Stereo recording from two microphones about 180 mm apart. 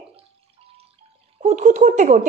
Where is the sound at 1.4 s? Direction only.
40° right (ahead or behind).